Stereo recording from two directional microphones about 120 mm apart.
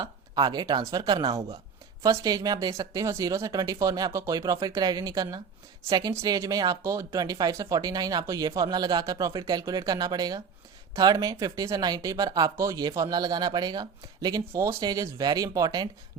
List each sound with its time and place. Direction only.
0.0 s speech: 35° right (ahead or behind)